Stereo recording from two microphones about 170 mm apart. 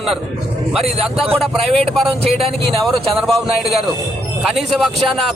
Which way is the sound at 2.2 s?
35° right (ahead or behind).